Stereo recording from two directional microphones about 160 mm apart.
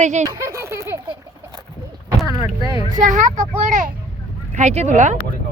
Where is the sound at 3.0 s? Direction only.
50° right (ahead or behind).